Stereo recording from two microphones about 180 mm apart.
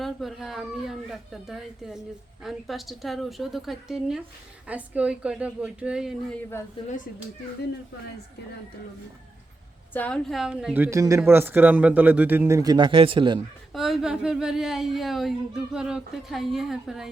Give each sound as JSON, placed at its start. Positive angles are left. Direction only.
{"t": 0.0, "sound": "speech", "side_deg": 0}
{"t": 9.9, "sound": "speech", "side_deg": 5}
{"t": 10.8, "sound": "speech", "side_deg": -15}
{"t": 13.7, "sound": "speech", "side_deg": 0}